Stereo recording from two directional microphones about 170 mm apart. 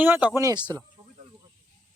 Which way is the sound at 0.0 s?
10° right (ahead or behind).